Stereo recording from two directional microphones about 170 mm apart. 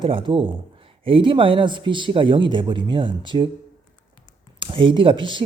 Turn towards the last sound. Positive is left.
turn(degrees=-30)  # may be behind; listen again after turning